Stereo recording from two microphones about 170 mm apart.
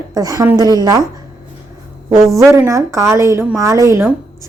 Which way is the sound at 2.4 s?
15° right (ahead or behind).